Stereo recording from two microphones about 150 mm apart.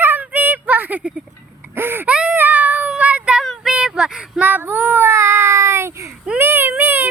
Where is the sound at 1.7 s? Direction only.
15° right (ahead or behind).